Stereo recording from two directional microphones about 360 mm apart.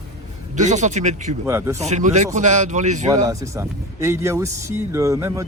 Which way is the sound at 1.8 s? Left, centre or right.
Centre.